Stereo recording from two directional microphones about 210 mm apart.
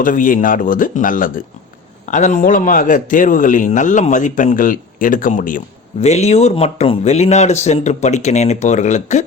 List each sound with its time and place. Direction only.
0.0 s a man's voice: 40° left (ahead or behind)